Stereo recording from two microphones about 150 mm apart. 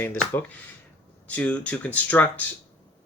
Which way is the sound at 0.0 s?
15° left (ahead or behind).